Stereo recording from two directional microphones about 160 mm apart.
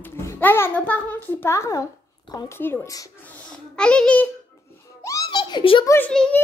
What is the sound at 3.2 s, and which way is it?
A child's voice, 5° left (ahead or behind).